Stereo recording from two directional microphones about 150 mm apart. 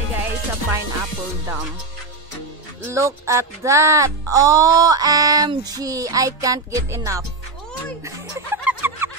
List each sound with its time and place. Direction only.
0.1 s music: 15° right (ahead or behind)
2.8 s music: 20° right (ahead or behind)
8.0 s snicker: 15° right (ahead or behind)